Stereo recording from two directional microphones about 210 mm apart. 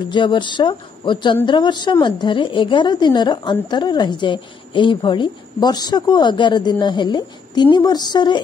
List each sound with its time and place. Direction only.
0.1 s speech: 20° left (ahead or behind)